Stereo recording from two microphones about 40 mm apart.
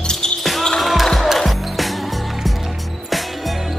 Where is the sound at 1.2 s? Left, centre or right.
Centre.